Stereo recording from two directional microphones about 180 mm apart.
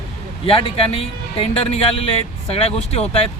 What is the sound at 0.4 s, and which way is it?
Speech, 30° left (ahead or behind).